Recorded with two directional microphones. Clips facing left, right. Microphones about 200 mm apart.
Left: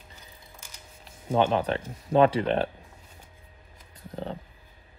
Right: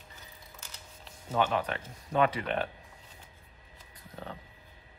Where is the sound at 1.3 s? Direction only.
30° left (ahead or behind).